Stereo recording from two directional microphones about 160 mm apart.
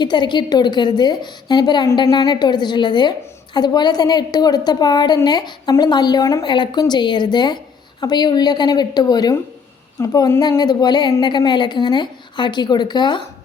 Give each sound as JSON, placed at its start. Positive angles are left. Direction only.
{"t": 0.0, "sound": "a woman's voice", "side_deg": 30}